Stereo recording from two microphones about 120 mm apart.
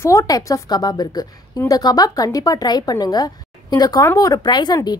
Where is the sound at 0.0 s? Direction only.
25° left (ahead or behind).